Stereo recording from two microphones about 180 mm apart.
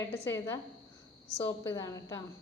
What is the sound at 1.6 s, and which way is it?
Speech, 20° left (ahead or behind).